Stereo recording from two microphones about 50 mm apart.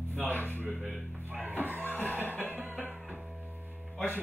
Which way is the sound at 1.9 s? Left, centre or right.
Left.